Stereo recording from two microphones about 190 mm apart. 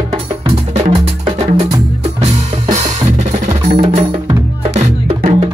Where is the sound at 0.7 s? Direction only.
30° right (ahead or behind).